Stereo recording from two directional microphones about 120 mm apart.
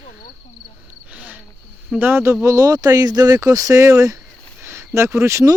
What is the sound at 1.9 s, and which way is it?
Speech, 20° right (ahead or behind).